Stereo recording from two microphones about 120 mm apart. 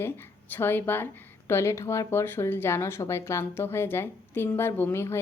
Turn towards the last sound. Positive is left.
turn(degrees=20)  # may be behind; listen again after turning